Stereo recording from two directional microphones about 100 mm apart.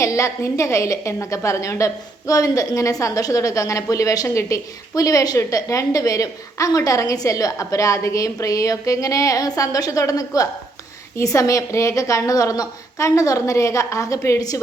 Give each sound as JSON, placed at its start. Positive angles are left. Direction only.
{"t": 0.0, "sound": "a woman's voice", "side_deg": 30}